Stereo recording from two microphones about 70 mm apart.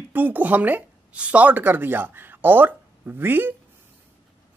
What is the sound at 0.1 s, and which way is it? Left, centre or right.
Speech, right.